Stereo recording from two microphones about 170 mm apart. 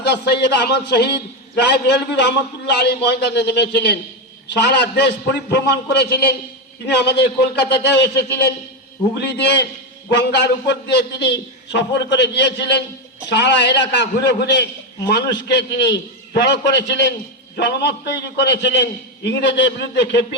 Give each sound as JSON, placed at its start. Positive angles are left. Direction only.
{"t": 0.0, "sound": "a man's voice", "side_deg": 75}
{"t": 17.6, "sound": "a man's voice", "side_deg": 80}